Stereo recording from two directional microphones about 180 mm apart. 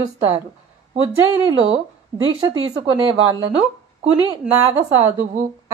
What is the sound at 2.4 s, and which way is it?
Speech, 25° right (ahead or behind).